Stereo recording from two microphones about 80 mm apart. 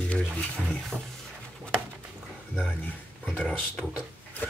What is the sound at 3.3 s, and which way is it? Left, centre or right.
Speech, left.